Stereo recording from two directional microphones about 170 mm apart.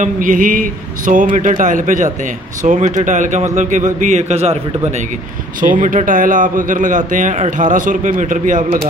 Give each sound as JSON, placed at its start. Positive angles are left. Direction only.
{"t": 0.0, "sound": "a man's voice", "side_deg": -50}
{"t": 5.6, "sound": "a man's voice", "side_deg": -50}